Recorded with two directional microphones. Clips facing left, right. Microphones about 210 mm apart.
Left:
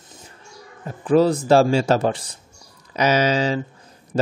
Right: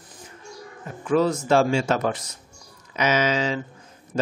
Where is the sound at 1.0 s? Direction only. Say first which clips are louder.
Left 5 dB; 35° left (ahead or behind).